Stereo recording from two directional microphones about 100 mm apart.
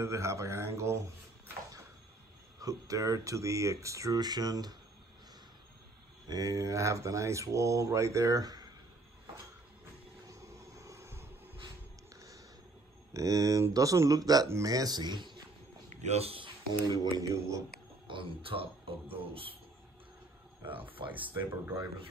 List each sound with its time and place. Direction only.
0.0 s a man's voice: 30° right (ahead or behind)
2.6 s speech: 35° right (ahead or behind)
6.2 s speech: 35° right (ahead or behind)
10.2 s vehicle: 30° right (ahead or behind)
13.1 s speech: 35° right (ahead or behind)
16.1 s speech: 85° right
16.8 s speech: 40° right (ahead or behind)
18.0 s speech: 60° right (ahead or behind)
20.9 s speech: 60° right (ahead or behind)